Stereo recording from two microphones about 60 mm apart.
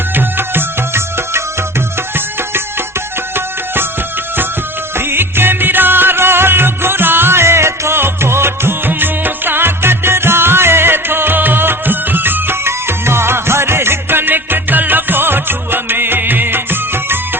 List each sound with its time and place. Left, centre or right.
0.1 s music: right
4.9 s music: right